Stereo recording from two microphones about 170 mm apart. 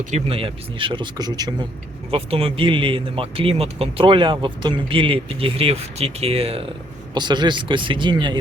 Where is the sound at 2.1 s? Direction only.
35° right (ahead or behind).